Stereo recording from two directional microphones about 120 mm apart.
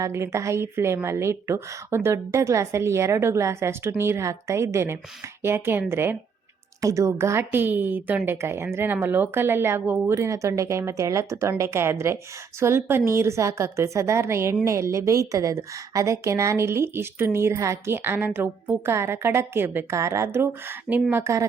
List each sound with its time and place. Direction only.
0.0 s a woman's voice: 25° right (ahead or behind)